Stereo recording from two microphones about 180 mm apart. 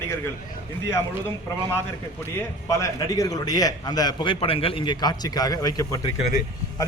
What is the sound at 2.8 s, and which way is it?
A man's voice, 20° left (ahead or behind).